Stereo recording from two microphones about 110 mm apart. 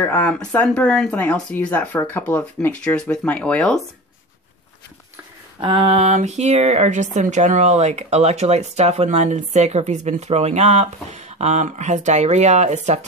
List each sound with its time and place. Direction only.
0.0 s speech: 15° left (ahead or behind)
5.6 s speech: 55° right (ahead or behind); by 13.0 s 90° right